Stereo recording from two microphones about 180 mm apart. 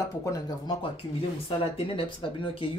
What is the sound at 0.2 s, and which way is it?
Speech, 20° left (ahead or behind).